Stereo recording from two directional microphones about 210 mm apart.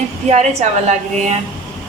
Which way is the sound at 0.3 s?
35° right (ahead or behind).